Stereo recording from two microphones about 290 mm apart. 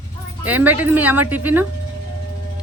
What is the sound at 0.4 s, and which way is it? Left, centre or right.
A woman's voice, centre.